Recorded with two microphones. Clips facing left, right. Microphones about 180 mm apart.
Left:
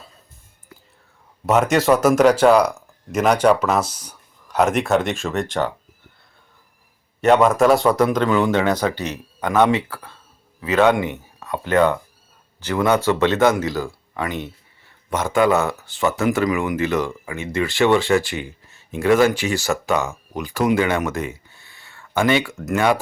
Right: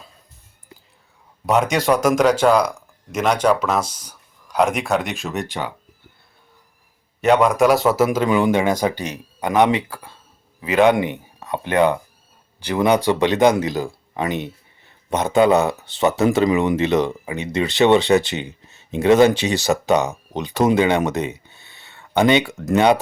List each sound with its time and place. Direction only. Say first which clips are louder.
1.5 s speech: left 1 dB; 5° left (ahead or behind)
7.2 s speech: left 1 dB; centre (ahead or behind); by 23.0 s 20° right (ahead or behind)